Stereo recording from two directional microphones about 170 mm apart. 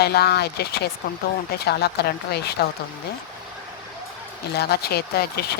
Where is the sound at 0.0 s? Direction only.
70° left (ahead or behind).